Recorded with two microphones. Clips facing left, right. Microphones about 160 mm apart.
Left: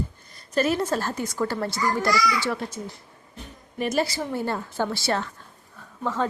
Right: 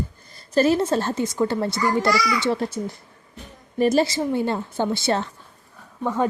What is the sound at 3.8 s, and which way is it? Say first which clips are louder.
A woman's voice: right 6 dB; 30° right (ahead or behind).